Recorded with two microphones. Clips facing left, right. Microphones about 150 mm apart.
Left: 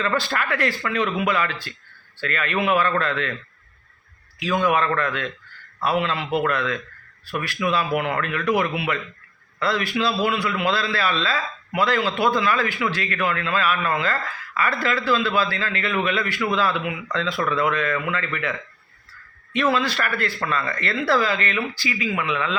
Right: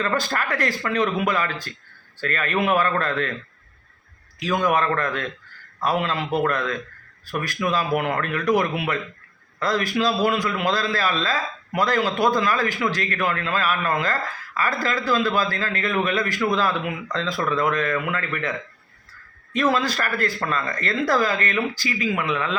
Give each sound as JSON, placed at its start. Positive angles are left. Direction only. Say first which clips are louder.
{"t": 0.0, "sound": "a man's voice", "louder": "even", "side_deg": -40}
{"t": 4.6, "sound": "a man's voice", "louder": "even", "side_deg": -40}
{"t": 19.7, "sound": "a man's voice", "louder": "even", "side_deg": -40}